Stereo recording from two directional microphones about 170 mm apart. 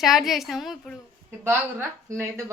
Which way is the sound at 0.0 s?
Centre (ahead or behind).